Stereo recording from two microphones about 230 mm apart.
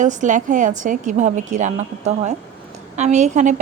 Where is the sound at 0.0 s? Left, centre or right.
Right.